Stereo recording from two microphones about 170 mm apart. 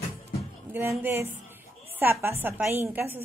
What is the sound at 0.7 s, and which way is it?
A woman's voice, 15° right (ahead or behind).